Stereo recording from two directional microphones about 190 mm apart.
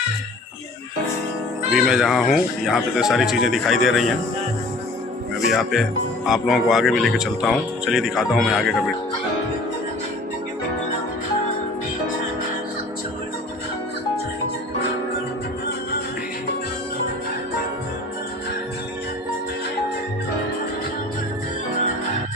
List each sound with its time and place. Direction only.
1.7 s a man's voice: centre (ahead or behind)
5.4 s a man's voice: centre (ahead or behind)